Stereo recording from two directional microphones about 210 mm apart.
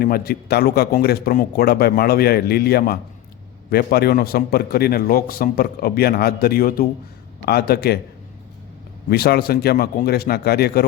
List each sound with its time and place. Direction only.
0.0 s a man's voice: 45° left (ahead or behind)
9.0 s a man's voice: 50° left (ahead or behind)